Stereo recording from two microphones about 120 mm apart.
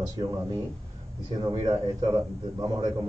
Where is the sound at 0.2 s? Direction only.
30° right (ahead or behind).